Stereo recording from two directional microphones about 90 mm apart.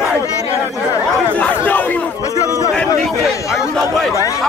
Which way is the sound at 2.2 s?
35° left (ahead or behind).